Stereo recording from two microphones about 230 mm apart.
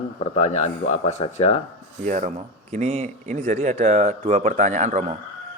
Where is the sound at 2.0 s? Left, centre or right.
Right.